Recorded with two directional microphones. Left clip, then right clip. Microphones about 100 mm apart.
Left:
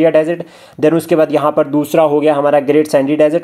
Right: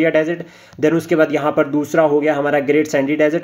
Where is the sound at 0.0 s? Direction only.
35° left (ahead or behind).